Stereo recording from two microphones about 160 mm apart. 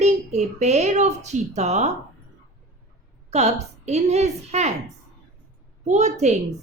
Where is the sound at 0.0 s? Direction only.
45° right (ahead or behind).